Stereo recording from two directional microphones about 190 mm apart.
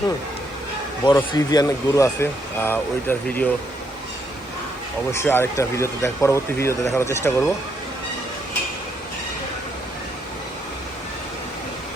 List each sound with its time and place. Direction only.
1.0 s speech: 20° left (ahead or behind)
5.1 s speech: 10° left (ahead or behind)